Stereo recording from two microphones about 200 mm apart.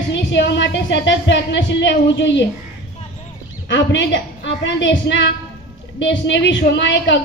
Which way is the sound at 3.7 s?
60° left (ahead or behind).